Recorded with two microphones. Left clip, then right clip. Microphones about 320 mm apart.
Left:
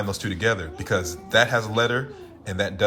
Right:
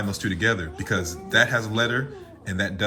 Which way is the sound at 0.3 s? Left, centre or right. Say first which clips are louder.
Even; centre.